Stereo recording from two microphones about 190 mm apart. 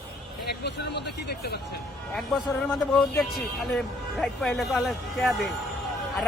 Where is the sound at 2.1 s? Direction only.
Centre (ahead or behind).